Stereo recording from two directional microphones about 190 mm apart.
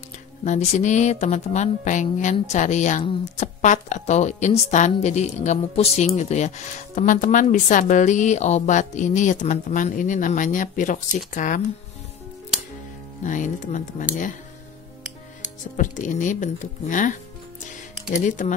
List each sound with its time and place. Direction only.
0.4 s a woman's voice: 40° left (ahead or behind)
13.2 s a woman's voice: 40° left (ahead or behind)
15.7 s a woman's voice: 40° left (ahead or behind)